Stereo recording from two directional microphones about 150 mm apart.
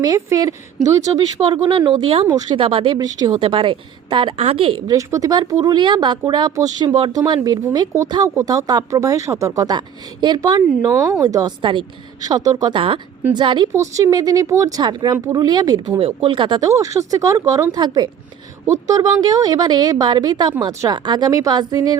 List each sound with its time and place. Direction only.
0.0 s a woman's voice: 25° right (ahead or behind)
4.9 s a woman's voice: 25° right (ahead or behind)